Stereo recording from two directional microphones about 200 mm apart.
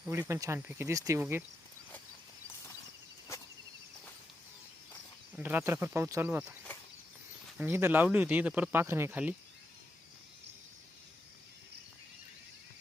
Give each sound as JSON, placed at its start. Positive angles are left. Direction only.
{"t": 0.1, "sound": "speech", "side_deg": -15}
{"t": 5.4, "sound": "speech", "side_deg": -10}
{"t": 7.6, "sound": "speech", "side_deg": -10}